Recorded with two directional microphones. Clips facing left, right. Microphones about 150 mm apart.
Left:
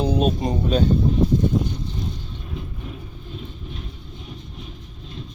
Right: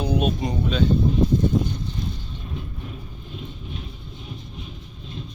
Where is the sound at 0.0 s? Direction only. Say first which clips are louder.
Left 2 dB; 35° left (ahead or behind).